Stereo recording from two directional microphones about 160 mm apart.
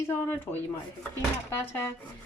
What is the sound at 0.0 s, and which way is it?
Speech, 15° left (ahead or behind).